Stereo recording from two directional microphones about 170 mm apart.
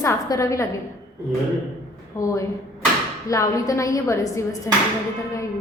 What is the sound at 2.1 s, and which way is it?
A woman's voice, 20° left (ahead or behind).